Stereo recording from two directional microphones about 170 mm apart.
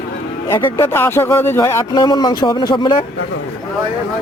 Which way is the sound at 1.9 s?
25° left (ahead or behind).